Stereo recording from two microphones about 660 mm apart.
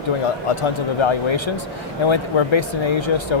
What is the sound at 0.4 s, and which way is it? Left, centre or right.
Speech, left.